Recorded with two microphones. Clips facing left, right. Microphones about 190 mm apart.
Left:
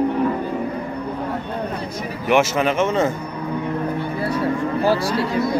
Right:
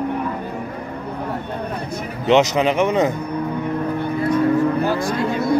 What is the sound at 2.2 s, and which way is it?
Speech, 20° right (ahead or behind).